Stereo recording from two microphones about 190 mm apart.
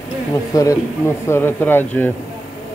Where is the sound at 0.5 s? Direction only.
20° left (ahead or behind).